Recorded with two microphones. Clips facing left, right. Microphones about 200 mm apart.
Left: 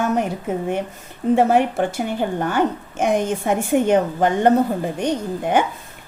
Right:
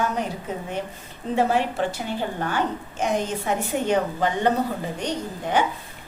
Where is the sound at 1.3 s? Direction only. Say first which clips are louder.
Left 4 dB; 50° left (ahead or behind).